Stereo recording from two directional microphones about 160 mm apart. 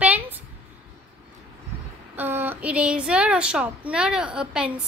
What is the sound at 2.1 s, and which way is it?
A woman's voice, 15° right (ahead or behind).